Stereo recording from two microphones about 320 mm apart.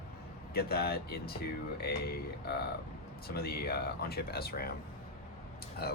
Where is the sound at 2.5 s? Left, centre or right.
Left.